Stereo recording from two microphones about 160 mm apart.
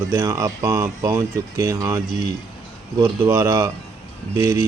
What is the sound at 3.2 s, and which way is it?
Speech, 20° right (ahead or behind).